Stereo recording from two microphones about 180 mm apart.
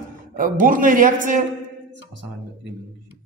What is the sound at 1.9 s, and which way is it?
Music, 80° right.